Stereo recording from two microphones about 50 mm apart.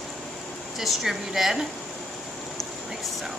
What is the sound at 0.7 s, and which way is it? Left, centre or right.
Speech, centre.